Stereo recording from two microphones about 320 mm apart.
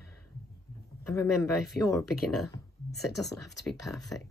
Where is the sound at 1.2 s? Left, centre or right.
Centre.